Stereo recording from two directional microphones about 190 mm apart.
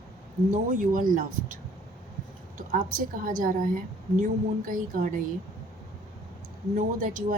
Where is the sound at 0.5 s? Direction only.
45° right (ahead or behind).